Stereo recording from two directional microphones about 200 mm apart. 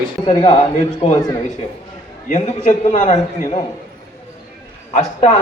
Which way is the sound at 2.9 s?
40° left (ahead or behind).